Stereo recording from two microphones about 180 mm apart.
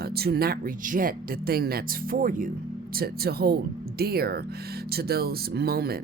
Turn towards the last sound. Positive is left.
turn(degrees=-60)  # may be behind; listen again after turning